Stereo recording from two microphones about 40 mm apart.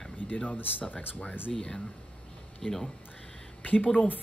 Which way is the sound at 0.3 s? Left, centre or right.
Left.